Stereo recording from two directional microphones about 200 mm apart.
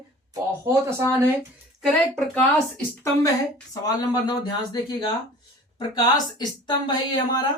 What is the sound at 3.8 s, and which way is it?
Speech, 20° left (ahead or behind).